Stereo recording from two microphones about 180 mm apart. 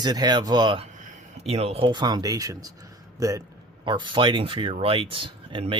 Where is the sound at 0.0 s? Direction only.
25° right (ahead or behind).